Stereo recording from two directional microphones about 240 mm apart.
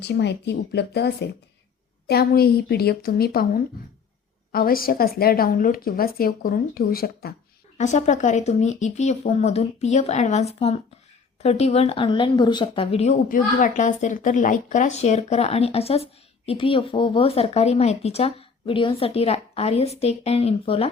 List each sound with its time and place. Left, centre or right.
0.0 s a woman's voice: left
7.8 s speech: left